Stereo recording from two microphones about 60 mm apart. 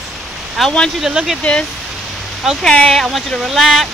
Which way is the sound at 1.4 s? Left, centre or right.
Left.